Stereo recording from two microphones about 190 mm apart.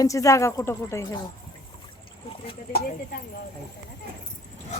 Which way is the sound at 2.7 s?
50° left (ahead or behind).